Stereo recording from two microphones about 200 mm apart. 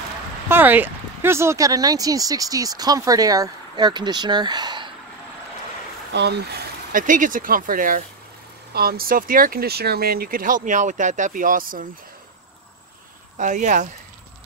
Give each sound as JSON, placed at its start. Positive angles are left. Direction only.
{"t": 0.5, "sound": "speech", "side_deg": -10}
{"t": 6.1, "sound": "speech", "side_deg": -55}
{"t": 13.4, "sound": "speech", "side_deg": -40}